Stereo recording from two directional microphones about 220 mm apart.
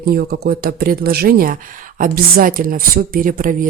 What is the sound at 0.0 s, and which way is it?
Speech, 45° right (ahead or behind).